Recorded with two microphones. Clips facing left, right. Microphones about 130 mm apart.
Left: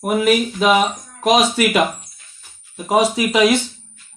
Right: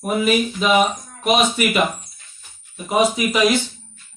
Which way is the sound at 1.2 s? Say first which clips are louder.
Left 3 dB; 90° left.